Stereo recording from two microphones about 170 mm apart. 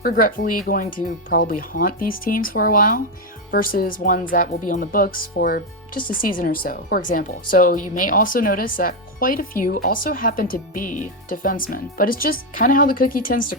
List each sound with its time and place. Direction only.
0.0 s speech: 55° left (ahead or behind)